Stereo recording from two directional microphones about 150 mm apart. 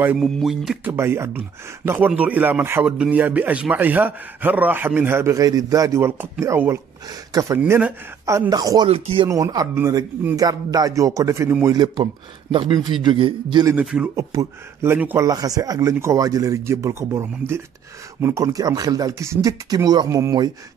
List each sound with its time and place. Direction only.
0.2 s speech: centre (ahead or behind)
0.8 s a man's voice: 15° right (ahead or behind)
8.8 s speech: 40° right (ahead or behind)
9.3 s speech: 25° right (ahead or behind)
13.8 s a man's voice: 5° right (ahead or behind)
14.1 s a man's voice: 20° right (ahead or behind)